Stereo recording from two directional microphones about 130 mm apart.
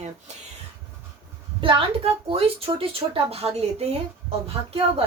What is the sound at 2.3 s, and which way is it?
A woman's voice, 45° right (ahead or behind).